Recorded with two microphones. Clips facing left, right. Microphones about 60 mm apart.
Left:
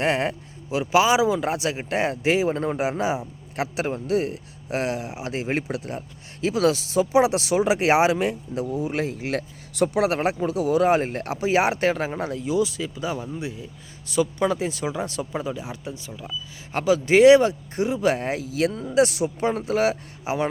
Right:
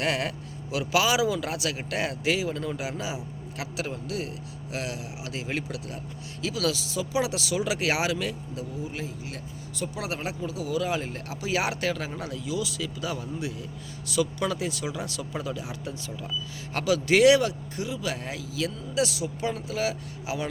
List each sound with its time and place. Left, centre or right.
0.0 s speech: left
16.0 s speech: centre
16.7 s speech: left